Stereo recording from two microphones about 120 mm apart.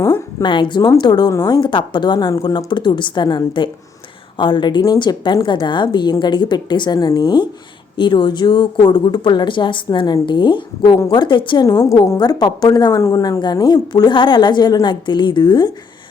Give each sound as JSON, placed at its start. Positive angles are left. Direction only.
{"t": 0.0, "sound": "a woman's voice", "side_deg": 20}
{"t": 0.4, "sound": "a woman's voice", "side_deg": 40}
{"t": 11.6, "sound": "a woman's voice", "side_deg": 25}
{"t": 13.4, "sound": "a woman's voice", "side_deg": 35}